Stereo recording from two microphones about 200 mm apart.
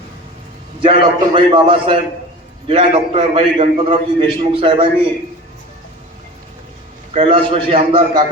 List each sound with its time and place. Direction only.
0.8 s a man's voice: 25° right (ahead or behind)
7.1 s a man's voice: 30° right (ahead or behind)